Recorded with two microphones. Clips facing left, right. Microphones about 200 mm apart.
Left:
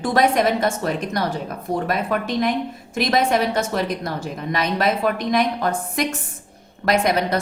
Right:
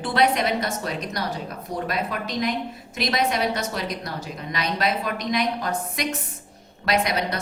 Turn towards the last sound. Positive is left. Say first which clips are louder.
# left 5 dB
turn(degrees=50)  # may be behind; listen again after turning